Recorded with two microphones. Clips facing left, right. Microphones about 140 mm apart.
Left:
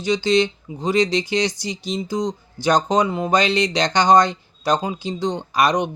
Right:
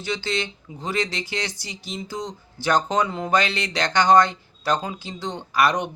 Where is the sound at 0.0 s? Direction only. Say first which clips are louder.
Left 9 dB; 15° left (ahead or behind).